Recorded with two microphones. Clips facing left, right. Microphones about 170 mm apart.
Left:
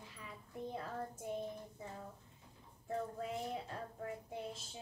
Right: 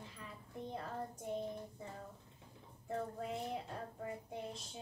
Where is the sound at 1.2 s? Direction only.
5° left (ahead or behind).